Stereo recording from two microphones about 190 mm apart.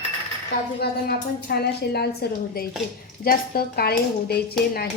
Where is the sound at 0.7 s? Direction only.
55° left (ahead or behind).